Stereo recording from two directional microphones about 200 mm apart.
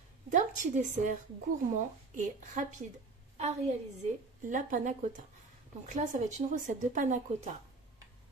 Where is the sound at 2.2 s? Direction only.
40° right (ahead or behind).